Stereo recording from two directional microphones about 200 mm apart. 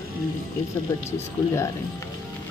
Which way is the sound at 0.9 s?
15° left (ahead or behind).